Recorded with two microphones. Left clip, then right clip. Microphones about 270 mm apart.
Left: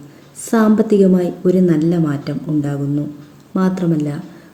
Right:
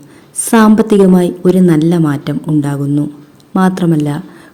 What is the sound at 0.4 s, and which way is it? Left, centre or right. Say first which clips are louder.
A woman's voice: right 6 dB; right.